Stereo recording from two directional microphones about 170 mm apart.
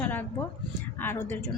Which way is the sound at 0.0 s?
10° left (ahead or behind).